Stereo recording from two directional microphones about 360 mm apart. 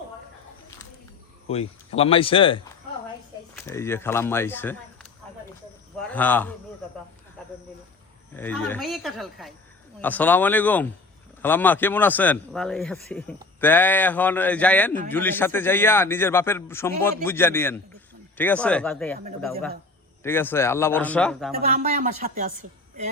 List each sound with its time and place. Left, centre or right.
1.5 s a man's voice: centre
6.0 s a man's voice: centre
8.4 s a man's voice: centre
20.2 s a man's voice: centre
21.5 s speech: right